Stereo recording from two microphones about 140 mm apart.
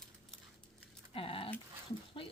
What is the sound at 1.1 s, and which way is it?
Dog, 40° left (ahead or behind).